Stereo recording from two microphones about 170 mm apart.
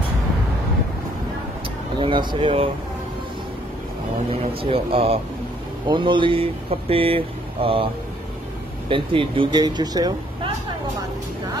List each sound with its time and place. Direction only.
2.0 s speech: 30° right (ahead or behind)
4.3 s speech: 35° right (ahead or behind)